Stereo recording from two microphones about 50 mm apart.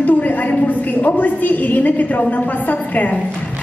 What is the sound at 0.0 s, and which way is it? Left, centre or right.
A woman's voice, left.